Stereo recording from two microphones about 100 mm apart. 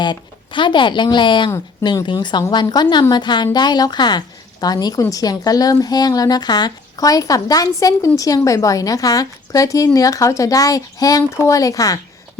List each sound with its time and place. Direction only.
0.0 s a woman's voice: 50° left (ahead or behind); by 11.9 s 35° left (ahead or behind)